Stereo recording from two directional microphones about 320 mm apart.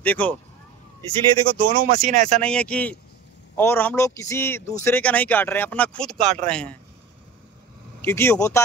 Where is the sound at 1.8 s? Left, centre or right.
Right.